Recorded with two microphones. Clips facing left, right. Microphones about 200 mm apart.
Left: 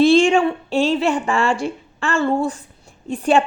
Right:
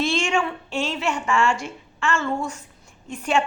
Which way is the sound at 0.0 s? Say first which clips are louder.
Left 10 dB; 35° left (ahead or behind).